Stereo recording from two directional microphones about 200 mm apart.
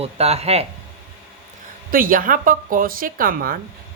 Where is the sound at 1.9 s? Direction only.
45° right (ahead or behind).